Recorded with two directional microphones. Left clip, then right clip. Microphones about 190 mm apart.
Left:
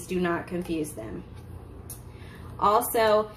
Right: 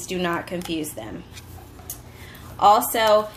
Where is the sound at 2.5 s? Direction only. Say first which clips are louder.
Right 6 dB; 60° right (ahead or behind).